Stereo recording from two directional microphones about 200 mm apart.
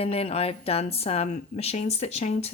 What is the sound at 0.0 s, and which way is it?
Speech, 30° left (ahead or behind).